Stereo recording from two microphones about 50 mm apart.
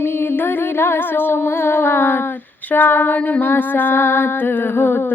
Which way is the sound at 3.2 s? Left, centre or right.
Left.